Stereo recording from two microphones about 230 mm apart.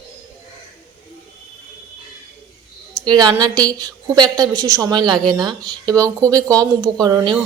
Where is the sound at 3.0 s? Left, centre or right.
Centre.